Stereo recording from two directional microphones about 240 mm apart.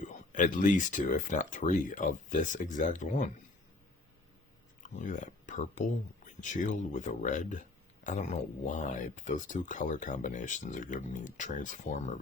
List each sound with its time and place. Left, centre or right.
0.0 s speech: left
4.8 s speech: left